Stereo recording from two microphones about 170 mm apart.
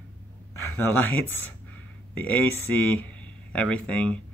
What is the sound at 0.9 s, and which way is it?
A man's voice, 10° left (ahead or behind).